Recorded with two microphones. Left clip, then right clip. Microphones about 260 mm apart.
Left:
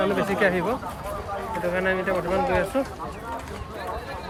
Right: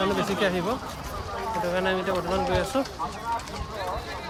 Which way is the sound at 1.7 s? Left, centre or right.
Centre.